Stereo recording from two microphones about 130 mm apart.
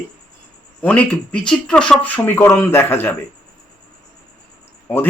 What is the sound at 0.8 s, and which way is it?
A man's voice, 10° left (ahead or behind).